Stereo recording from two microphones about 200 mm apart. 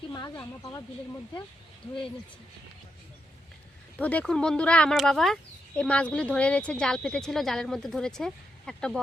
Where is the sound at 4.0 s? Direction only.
5° left (ahead or behind).